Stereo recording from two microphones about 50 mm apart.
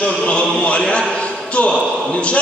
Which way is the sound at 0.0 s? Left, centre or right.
Centre.